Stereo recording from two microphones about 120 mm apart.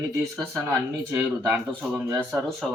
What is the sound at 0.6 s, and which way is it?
A man's voice, 15° right (ahead or behind).